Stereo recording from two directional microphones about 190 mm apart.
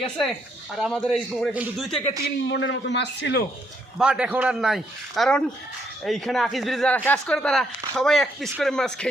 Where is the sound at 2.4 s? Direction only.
75° left (ahead or behind).